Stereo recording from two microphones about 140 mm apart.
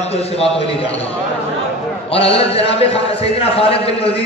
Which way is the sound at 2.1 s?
45° left (ahead or behind).